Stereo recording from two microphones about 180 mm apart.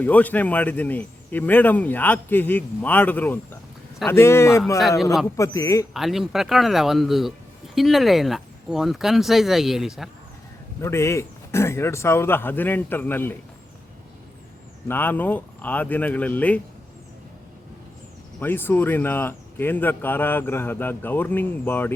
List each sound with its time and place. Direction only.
0.0 s speech: 10° left (ahead or behind)
4.8 s speech: centre (ahead or behind)
5.4 s speech: 15° left (ahead or behind)
5.9 s speech: centre (ahead or behind)
10.8 s speech: 15° left (ahead or behind)
14.8 s speech: 10° left (ahead or behind)
18.3 s speech: 10° left (ahead or behind)